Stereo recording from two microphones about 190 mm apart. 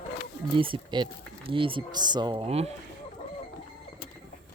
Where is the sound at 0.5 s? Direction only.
25° right (ahead or behind).